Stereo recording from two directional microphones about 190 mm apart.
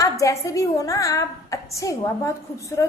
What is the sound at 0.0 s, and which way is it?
A woman's voice, 15° left (ahead or behind).